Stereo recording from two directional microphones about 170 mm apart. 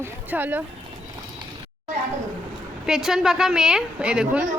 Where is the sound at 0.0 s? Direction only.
10° right (ahead or behind).